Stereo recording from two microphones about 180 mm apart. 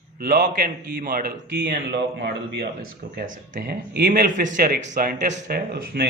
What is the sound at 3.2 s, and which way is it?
A man's voice, 55° right (ahead or behind).